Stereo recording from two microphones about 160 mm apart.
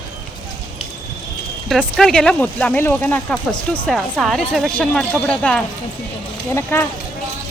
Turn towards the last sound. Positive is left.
turn(degrees=15)  # may be behind; listen again after turning